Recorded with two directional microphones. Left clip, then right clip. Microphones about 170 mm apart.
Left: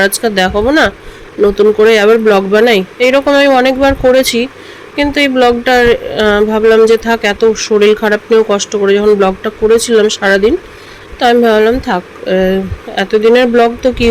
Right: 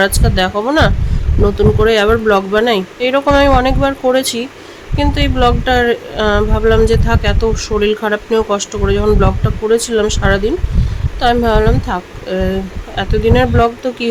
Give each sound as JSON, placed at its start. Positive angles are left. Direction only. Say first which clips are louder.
{"t": 0.0, "sound": "speech", "louder": "left 3 dB", "side_deg": 15}